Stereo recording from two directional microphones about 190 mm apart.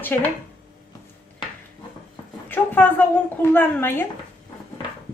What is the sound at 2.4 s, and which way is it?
Speech, 10° left (ahead or behind).